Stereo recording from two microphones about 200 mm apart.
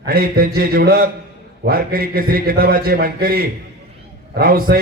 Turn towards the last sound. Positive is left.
turn(degrees=-45)  # may be behind; listen again after turning